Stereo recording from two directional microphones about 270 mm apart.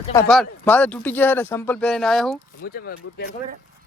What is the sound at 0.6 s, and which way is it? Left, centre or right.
Speech, centre.